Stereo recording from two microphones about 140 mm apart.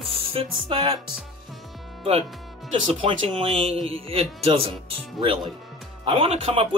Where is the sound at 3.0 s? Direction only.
40° right (ahead or behind).